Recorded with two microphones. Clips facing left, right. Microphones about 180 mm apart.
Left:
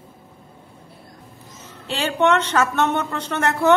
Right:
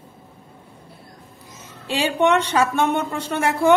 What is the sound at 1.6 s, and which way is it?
A woman's voice, 15° right (ahead or behind).